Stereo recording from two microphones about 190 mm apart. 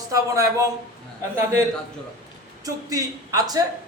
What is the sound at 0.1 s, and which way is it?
Speech, 15° right (ahead or behind).